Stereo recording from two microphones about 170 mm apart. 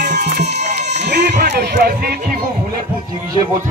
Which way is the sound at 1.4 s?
75° right (ahead or behind).